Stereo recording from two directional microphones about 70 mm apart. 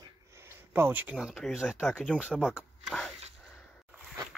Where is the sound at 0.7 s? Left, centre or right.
Right.